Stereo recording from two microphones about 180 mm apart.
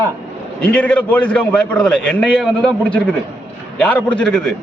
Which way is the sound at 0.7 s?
10° left (ahead or behind).